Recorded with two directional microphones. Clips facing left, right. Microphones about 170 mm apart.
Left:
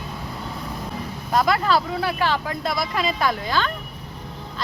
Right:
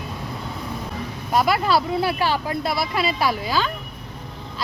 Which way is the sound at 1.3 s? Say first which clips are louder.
Even; 5° right (ahead or behind).